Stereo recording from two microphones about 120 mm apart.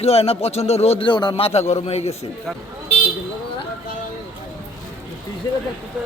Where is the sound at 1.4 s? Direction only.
60° left (ahead or behind).